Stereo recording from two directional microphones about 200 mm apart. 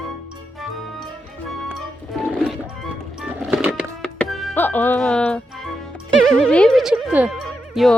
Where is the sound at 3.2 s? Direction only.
5° right (ahead or behind).